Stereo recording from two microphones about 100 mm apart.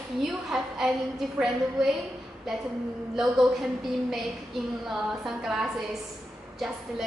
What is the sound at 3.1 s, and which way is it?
A woman's voice, centre (ahead or behind).